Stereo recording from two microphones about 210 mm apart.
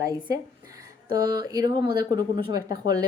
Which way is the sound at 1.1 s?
20° right (ahead or behind).